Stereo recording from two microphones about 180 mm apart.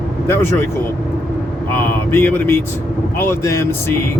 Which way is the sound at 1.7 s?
10° left (ahead or behind).